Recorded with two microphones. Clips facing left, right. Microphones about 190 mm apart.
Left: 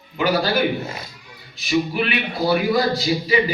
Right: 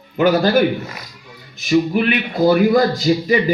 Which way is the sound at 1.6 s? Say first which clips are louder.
Right 5 dB; 50° right (ahead or behind).